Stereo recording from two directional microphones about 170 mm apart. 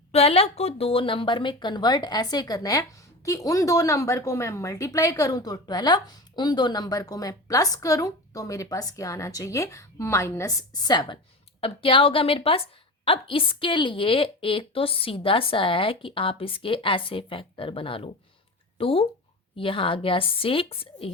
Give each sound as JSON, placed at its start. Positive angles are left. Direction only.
{"t": 0.1, "sound": "a woman's voice", "side_deg": 35}